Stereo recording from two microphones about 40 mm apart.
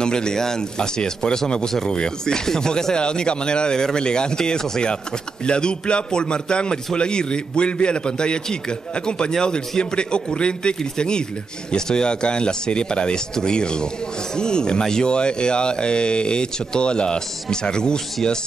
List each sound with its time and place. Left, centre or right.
0.0 s speech: centre